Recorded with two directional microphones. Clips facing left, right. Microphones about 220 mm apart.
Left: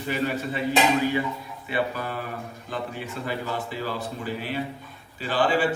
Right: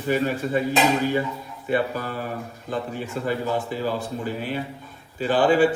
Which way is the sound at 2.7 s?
45° right (ahead or behind).